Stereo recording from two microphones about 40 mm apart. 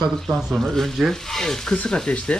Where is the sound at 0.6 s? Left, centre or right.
Centre.